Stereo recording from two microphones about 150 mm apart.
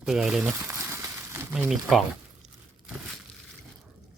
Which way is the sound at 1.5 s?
5° right (ahead or behind).